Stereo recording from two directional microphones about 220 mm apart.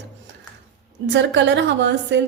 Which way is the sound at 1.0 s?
55° right (ahead or behind).